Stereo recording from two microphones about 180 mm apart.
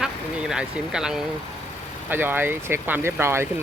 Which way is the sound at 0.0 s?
5° right (ahead or behind).